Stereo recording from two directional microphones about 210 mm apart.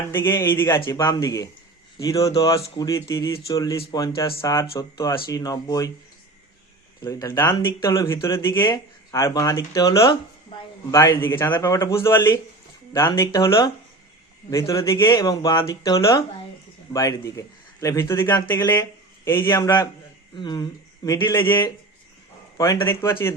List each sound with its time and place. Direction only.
0.1 s speech: 10° left (ahead or behind)
7.0 s speech: 15° left (ahead or behind)